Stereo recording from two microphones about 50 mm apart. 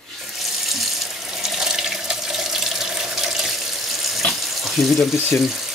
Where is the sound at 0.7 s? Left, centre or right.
Centre.